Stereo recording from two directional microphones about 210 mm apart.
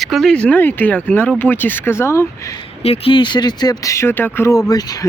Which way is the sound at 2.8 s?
25° left (ahead or behind).